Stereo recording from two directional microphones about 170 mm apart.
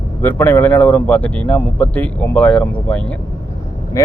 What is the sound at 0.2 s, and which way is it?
Speech, 10° left (ahead or behind).